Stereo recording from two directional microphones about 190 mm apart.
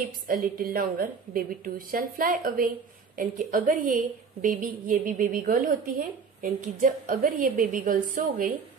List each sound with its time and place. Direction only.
0.3 s a woman's voice: 50° right (ahead or behind)